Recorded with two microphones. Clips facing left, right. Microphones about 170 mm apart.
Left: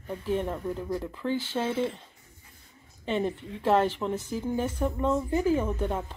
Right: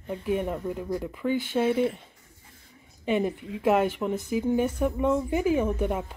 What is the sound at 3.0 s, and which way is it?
Speech, 10° right (ahead or behind).